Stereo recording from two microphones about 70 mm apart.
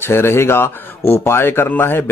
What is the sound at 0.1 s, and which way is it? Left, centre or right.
Speech, left.